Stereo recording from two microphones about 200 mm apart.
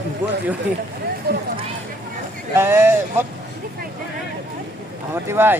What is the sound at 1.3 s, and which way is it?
Speech, 50° right (ahead or behind).